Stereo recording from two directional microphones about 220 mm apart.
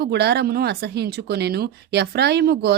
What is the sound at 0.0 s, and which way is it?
Speech, 50° right (ahead or behind).